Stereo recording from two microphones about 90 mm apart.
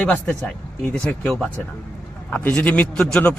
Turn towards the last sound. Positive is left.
turn(degrees=10)  # may be behind; listen again after turning